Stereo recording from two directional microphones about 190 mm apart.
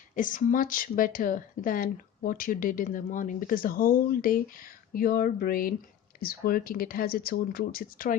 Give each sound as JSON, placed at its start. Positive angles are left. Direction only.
{"t": 0.2, "sound": "speech", "side_deg": 45}